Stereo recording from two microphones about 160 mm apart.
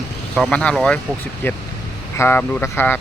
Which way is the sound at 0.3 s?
5° left (ahead or behind).